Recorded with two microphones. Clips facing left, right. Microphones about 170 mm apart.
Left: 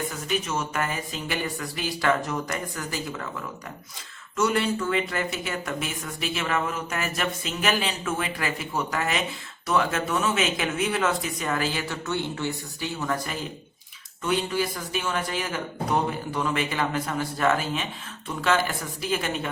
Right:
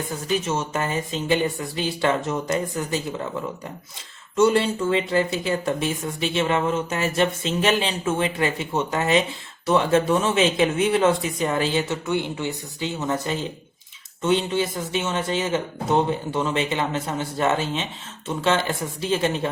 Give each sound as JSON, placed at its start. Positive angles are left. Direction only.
{"t": 0.1, "sound": "speech", "side_deg": -30}
{"t": 4.4, "sound": "speech", "side_deg": -25}
{"t": 12.0, "sound": "speech", "side_deg": -15}